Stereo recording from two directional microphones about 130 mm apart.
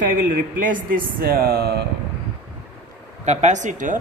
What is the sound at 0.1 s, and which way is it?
Speech, 90° right.